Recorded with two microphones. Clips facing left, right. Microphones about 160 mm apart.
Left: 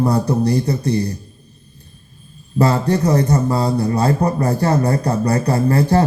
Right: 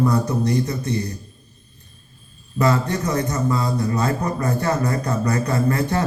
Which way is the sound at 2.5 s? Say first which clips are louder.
Left 4 dB; 35° left (ahead or behind).